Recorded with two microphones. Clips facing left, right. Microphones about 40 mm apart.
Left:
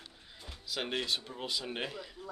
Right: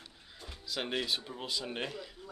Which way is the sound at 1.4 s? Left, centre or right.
Centre.